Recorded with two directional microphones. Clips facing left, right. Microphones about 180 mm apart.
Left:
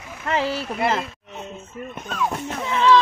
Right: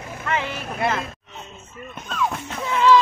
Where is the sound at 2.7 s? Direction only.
10° right (ahead or behind).